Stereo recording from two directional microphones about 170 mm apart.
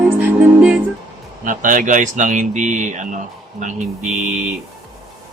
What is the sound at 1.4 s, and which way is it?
Speech, 50° right (ahead or behind).